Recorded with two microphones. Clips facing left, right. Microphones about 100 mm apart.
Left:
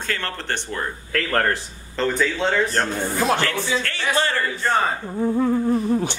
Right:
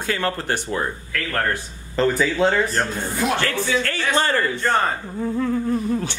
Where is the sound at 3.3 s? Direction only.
30° left (ahead or behind).